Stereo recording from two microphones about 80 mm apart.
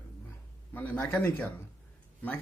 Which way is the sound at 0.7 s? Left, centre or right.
Left.